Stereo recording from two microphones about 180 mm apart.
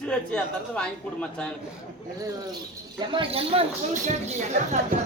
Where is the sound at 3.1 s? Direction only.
30° right (ahead or behind).